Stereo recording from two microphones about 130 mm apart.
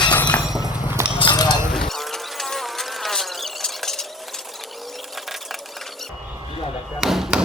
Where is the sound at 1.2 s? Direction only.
35° left (ahead or behind).